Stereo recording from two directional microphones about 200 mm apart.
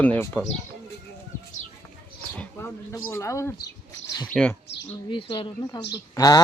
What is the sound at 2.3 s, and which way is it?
Speech, 5° left (ahead or behind).